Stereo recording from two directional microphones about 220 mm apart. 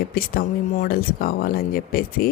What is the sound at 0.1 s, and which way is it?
Speech, 40° left (ahead or behind).